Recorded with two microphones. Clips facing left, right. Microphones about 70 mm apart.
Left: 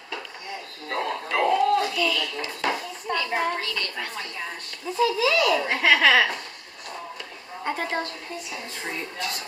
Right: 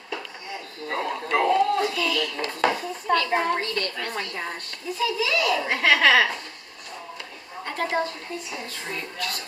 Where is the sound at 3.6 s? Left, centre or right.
Right.